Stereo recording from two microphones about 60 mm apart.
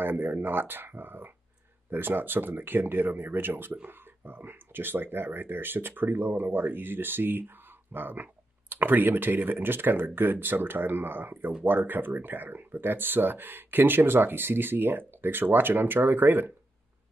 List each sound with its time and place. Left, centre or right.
0.0 s speech: right